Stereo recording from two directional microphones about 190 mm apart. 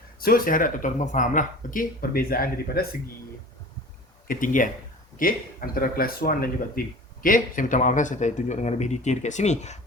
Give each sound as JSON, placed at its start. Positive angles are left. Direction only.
{"t": 0.2, "sound": "speech", "side_deg": 50}
{"t": 4.3, "sound": "speech", "side_deg": 45}